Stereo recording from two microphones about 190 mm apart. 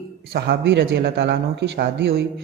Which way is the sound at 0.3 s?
60° right (ahead or behind).